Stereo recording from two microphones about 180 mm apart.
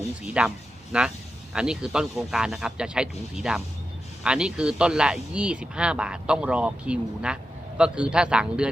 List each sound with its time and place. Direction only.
0.0 s speech: 5° right (ahead or behind)